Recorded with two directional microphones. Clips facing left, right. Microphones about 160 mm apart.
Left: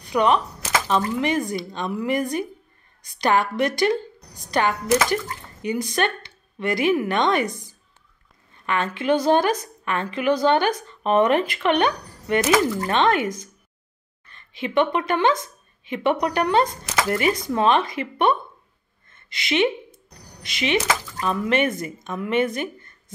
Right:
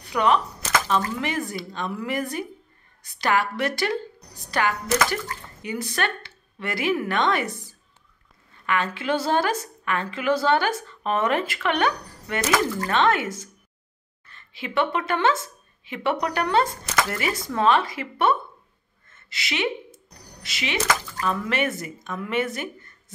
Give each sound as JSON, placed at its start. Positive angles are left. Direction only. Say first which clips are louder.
{"t": 0.1, "sound": "speech", "louder": "left 2 dB", "side_deg": 20}
{"t": 14.5, "sound": "speech", "louder": "left 4 dB", "side_deg": 20}